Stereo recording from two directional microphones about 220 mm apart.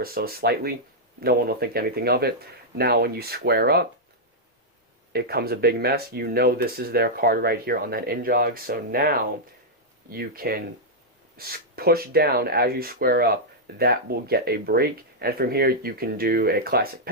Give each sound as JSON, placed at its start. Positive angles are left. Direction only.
{"t": 0.0, "sound": "speech", "side_deg": -45}
{"t": 5.1, "sound": "speech", "side_deg": -45}